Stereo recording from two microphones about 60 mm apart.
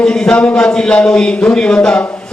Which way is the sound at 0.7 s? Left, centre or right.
Centre.